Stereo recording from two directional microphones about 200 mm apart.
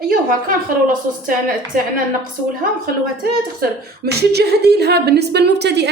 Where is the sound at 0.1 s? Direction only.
45° right (ahead or behind).